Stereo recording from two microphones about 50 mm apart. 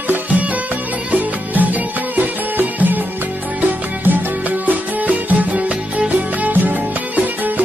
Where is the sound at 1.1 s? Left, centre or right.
Right.